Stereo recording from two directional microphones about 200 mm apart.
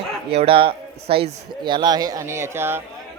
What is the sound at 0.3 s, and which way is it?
A man's voice, 25° right (ahead or behind).